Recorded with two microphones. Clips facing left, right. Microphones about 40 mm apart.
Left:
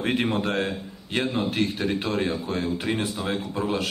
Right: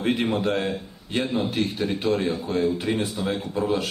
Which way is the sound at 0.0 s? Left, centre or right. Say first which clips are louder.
Right 1 dB; left.